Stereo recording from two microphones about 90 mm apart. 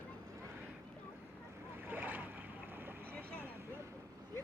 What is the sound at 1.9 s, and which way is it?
Boat, 20° right (ahead or behind).